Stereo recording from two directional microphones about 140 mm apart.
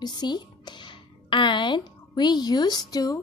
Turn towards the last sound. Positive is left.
turn(degrees=25)  # may be behind; listen again after turning